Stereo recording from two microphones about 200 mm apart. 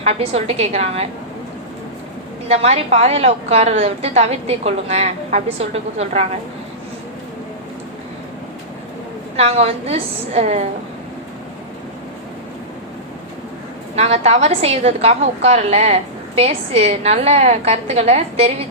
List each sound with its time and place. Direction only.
0.0 s a woman's voice: 30° right (ahead or behind)
2.5 s a woman's voice: 30° right (ahead or behind)
9.3 s a woman's voice: 30° right (ahead or behind)
13.9 s a woman's voice: 30° right (ahead or behind)